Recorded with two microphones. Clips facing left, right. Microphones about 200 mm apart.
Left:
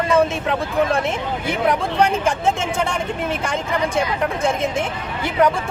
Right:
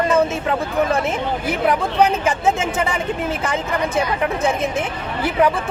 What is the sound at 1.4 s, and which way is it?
Speech, 5° right (ahead or behind).